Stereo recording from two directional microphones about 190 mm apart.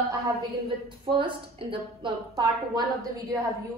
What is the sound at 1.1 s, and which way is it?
A woman's voice, 30° right (ahead or behind).